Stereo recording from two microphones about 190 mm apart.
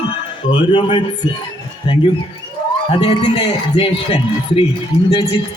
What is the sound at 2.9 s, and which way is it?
A woman's voice, 25° left (ahead or behind).